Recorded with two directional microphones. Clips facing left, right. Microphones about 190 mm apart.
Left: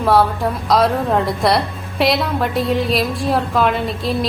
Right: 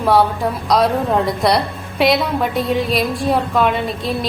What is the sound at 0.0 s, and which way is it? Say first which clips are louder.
A woman's voice: even; centre (ahead or behind).